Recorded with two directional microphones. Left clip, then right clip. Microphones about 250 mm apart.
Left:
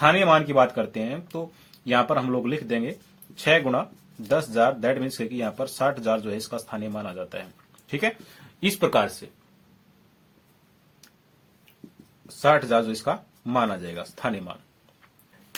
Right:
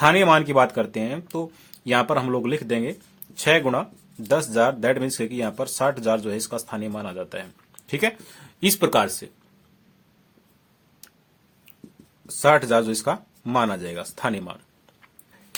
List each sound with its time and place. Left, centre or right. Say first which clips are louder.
0.0 s speech: right 2 dB; right
12.4 s speech: right 2 dB; right